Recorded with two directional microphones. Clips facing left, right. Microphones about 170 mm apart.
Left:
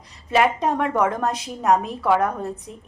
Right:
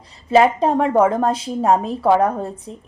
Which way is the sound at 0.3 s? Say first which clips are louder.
Right 5 dB; 30° right (ahead or behind).